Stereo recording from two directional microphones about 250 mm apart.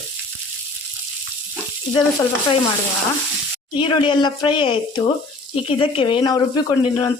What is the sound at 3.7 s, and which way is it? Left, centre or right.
Speech, centre.